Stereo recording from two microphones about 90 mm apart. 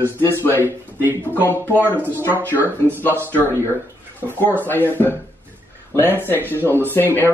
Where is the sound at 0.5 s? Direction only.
25° right (ahead or behind).